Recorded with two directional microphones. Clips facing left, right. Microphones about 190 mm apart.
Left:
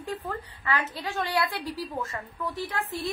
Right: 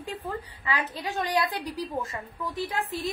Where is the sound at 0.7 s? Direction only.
15° right (ahead or behind).